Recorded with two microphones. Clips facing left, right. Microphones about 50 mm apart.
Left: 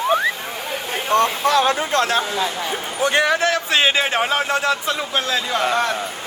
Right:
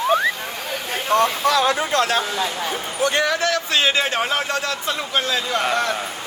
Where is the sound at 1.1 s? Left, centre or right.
Left.